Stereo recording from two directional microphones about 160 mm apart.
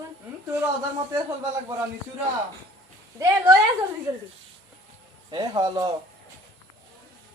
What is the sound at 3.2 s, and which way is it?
Speech, 20° right (ahead or behind).